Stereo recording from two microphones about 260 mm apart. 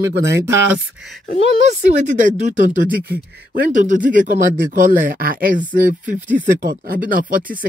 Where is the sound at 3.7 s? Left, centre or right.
Right.